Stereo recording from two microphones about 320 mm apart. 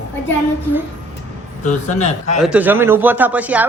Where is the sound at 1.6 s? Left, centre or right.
Left.